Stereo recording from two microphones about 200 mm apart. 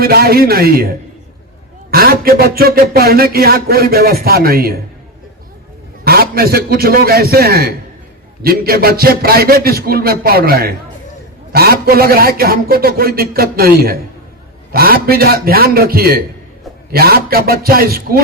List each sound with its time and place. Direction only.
0.0 s speech: 50° right (ahead or behind)
6.1 s speech: 50° right (ahead or behind)